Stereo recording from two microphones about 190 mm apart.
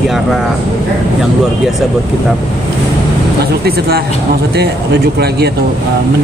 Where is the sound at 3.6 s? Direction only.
55° right (ahead or behind).